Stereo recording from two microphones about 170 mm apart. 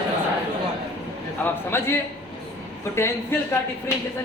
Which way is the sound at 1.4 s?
15° left (ahead or behind).